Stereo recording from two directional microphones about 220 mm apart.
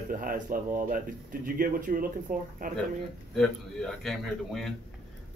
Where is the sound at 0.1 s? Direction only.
40° right (ahead or behind).